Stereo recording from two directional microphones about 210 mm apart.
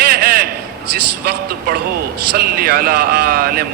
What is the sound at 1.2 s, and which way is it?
A man's voice, 50° right (ahead or behind).